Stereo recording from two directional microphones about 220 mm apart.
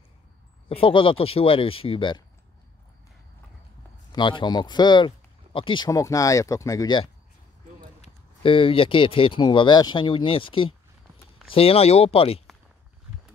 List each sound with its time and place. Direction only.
0.7 s speech: 25° left (ahead or behind)
4.1 s speech: 20° left (ahead or behind)